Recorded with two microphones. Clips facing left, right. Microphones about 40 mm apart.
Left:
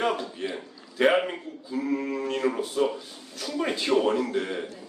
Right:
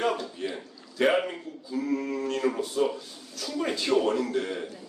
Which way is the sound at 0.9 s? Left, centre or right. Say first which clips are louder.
Left 2 dB; centre.